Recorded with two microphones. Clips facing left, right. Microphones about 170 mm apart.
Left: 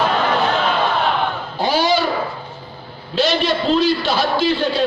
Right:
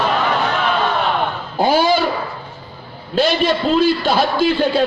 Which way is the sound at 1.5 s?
50° right (ahead or behind).